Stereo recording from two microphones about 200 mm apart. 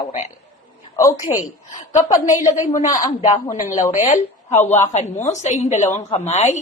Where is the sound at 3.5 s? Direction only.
40° left (ahead or behind).